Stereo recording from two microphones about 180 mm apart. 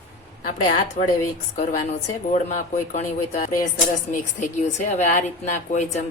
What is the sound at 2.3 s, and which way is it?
A woman's voice, 40° left (ahead or behind).